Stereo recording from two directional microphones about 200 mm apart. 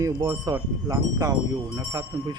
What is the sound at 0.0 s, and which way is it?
Speech, 15° right (ahead or behind).